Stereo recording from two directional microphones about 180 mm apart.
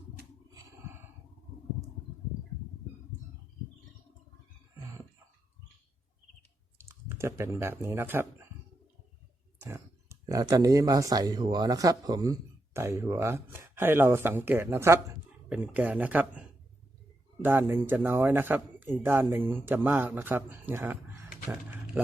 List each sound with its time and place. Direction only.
0.5 s a sound: 20° right (ahead or behind)
6.7 s speech: 15° right (ahead or behind)
9.6 s speech: 15° right (ahead or behind)
17.4 s speech: 10° right (ahead or behind)